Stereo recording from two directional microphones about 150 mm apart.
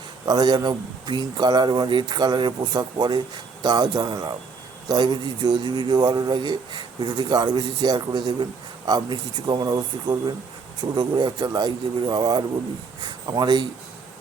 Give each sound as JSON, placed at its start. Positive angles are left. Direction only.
{"t": 0.3, "sound": "speech", "side_deg": -25}